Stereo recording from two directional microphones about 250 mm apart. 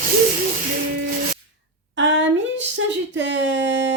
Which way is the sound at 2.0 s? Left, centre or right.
Right.